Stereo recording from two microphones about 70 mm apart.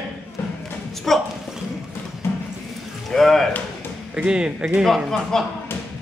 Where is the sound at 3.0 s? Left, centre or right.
Centre.